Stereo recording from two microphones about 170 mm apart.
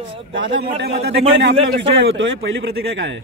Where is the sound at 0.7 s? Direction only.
70° right (ahead or behind); by 2.5 s 90° right.